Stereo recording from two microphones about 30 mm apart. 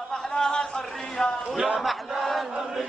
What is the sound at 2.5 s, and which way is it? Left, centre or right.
Chant, centre.